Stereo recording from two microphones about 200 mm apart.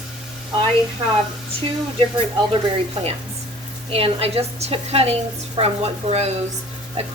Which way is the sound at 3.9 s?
30° right (ahead or behind).